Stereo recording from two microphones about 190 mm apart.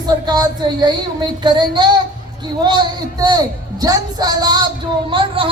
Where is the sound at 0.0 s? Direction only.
20° right (ahead or behind).